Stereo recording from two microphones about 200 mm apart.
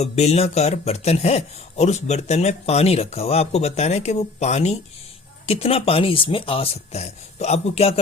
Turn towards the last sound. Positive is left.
turn(degrees=30)  # may be behind; listen again after turning